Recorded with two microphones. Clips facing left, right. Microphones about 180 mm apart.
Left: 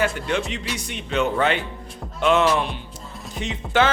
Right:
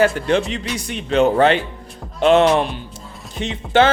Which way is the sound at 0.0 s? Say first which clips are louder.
Right 7 dB; 35° right (ahead or behind).